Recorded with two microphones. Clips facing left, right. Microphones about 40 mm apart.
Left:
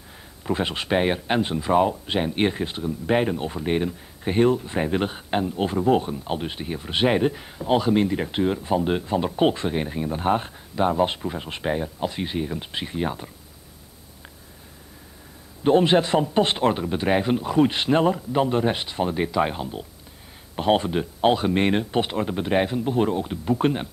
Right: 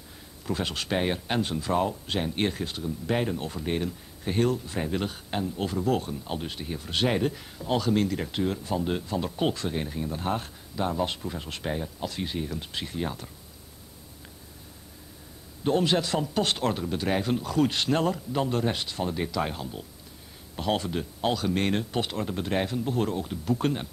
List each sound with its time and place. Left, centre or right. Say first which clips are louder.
0.4 s speech: left 5 dB; left
15.6 s speech: left 7 dB; left